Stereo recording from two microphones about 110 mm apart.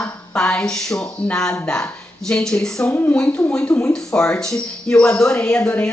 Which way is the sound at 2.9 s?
20° left (ahead or behind).